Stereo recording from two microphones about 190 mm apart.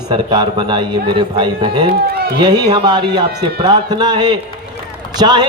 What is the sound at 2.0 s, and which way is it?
Speech, 55° right (ahead or behind).